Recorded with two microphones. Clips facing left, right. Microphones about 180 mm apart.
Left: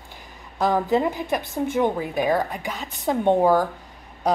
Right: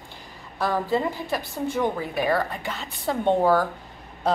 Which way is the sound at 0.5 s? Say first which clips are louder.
Left 3 dB; 20° left (ahead or behind).